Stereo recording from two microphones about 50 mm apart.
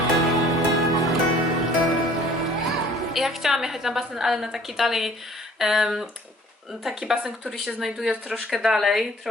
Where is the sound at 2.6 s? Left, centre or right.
Centre.